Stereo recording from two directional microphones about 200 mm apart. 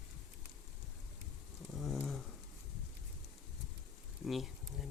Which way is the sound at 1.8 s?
Centre (ahead or behind).